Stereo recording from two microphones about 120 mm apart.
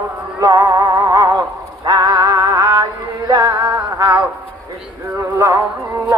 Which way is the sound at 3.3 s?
30° right (ahead or behind).